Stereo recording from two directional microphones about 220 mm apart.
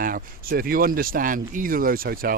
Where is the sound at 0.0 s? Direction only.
40° right (ahead or behind).